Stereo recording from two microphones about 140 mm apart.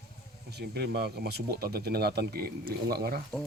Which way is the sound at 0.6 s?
90° right.